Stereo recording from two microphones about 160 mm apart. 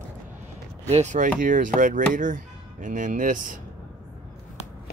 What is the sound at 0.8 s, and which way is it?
Speech, 45° right (ahead or behind).